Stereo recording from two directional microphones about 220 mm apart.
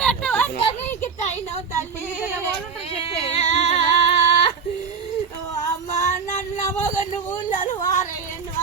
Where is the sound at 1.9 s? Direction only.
15° left (ahead or behind).